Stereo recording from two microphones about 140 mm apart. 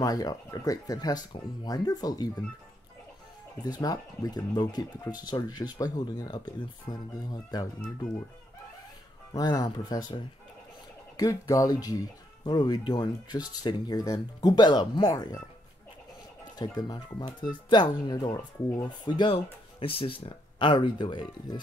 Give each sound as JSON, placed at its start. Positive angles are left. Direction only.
{"t": 0.0, "sound": "speech", "side_deg": 25}
{"t": 3.6, "sound": "speech", "side_deg": 30}
{"t": 9.3, "sound": "speech", "side_deg": 25}
{"t": 16.5, "sound": "speech", "side_deg": 30}